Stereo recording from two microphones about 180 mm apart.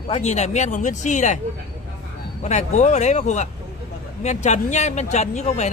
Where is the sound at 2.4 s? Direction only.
40° left (ahead or behind).